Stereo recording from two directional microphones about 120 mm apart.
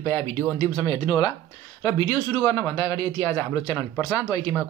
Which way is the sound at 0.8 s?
40° left (ahead or behind).